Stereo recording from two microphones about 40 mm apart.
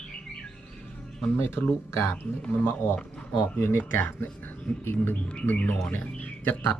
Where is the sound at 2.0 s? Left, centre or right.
Left.